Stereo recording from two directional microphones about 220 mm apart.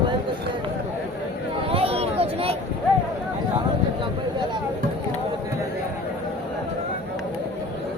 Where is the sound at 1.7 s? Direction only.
25° right (ahead or behind).